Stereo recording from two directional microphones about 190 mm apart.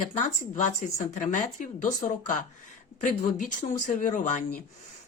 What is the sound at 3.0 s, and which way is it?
A woman's voice, 45° left (ahead or behind).